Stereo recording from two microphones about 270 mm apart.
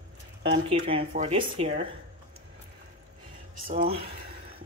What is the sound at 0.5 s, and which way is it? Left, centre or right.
Speech, right.